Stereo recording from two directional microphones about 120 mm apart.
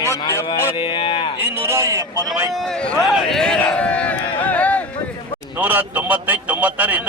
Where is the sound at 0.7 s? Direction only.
40° left (ahead or behind).